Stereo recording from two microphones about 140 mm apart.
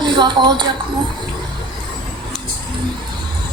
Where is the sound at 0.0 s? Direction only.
30° right (ahead or behind).